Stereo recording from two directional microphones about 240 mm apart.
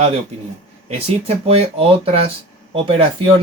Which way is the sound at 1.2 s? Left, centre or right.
Right.